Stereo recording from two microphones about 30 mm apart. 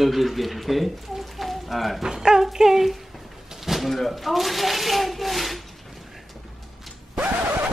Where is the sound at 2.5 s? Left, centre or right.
Centre.